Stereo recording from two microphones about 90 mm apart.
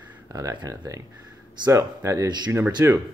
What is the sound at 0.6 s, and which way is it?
Speech, 40° right (ahead or behind).